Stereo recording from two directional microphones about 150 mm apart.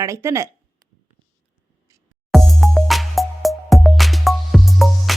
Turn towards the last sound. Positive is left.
turn(degrees=0)  # may be behind; listen again after turning